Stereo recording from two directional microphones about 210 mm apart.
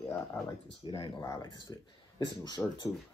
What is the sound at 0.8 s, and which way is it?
Speech, 25° left (ahead or behind).